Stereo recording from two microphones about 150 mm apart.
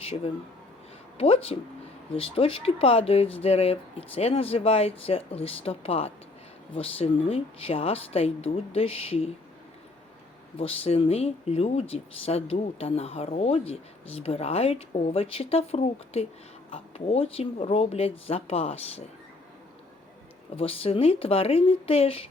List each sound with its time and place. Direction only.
1.2 s speech: 40° left (ahead or behind)
10.6 s speech: 40° left (ahead or behind)
20.6 s speech: 40° left (ahead or behind)